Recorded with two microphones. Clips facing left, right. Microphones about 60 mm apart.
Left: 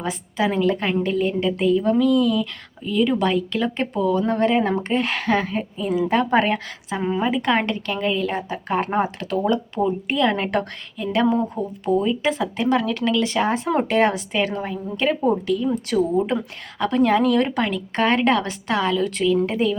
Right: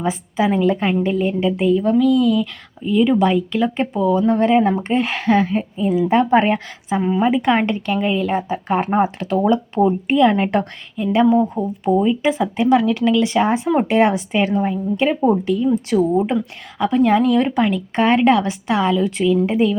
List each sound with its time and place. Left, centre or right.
0.0 s a woman's voice: centre
10.2 s a woman's voice: centre
16.3 s a woman's voice: centre